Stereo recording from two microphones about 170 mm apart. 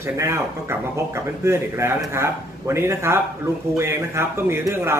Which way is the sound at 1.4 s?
15° right (ahead or behind).